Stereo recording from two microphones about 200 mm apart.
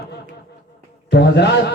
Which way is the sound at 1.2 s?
55° left (ahead or behind).